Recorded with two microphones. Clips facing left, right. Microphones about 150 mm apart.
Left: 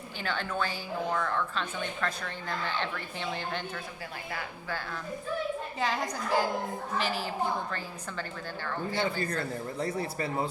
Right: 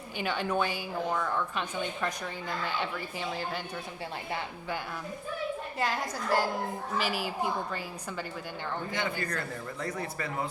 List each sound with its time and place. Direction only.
0.2 s a woman's voice: 15° right (ahead or behind)
4.3 s a woman's voice: 25° right (ahead or behind)
5.8 s a woman's voice: 5° right (ahead or behind)
9.2 s speech: 30° left (ahead or behind)